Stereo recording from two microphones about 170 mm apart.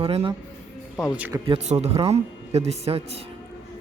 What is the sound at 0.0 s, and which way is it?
Speech, 35° right (ahead or behind).